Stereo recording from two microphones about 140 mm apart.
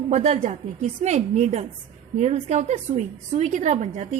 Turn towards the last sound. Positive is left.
turn(degrees=-55)  # may be behind; listen again after turning